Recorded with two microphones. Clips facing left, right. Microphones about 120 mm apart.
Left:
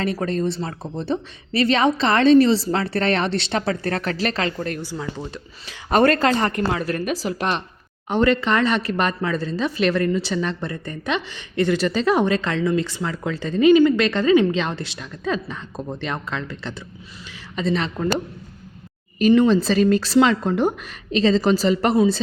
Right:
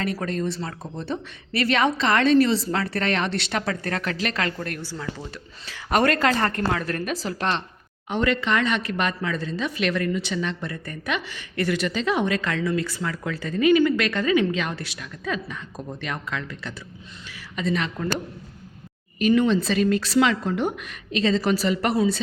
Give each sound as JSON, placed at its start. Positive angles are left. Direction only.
{"t": 0.0, "sound": "speech", "side_deg": 30}
{"t": 5.9, "sound": "speech", "side_deg": 30}
{"t": 6.7, "sound": "speech", "side_deg": 10}
{"t": 8.1, "sound": "speech", "side_deg": 35}
{"t": 19.2, "sound": "speech", "side_deg": 35}